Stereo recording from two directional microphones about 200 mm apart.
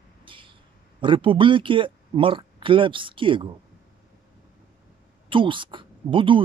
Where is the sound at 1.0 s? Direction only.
25° right (ahead or behind).